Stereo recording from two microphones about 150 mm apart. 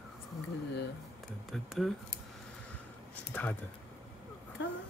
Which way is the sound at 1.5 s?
Centre (ahead or behind).